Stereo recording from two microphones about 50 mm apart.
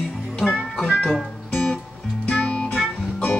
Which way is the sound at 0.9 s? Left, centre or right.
Centre.